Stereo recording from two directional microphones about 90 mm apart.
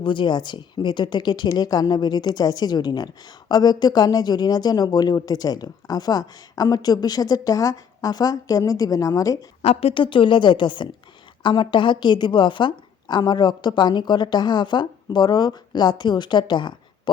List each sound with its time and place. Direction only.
0.0 s speech: 65° left (ahead or behind); by 9.5 s 40° left (ahead or behind)
9.8 s a woman's voice: 70° left (ahead or behind)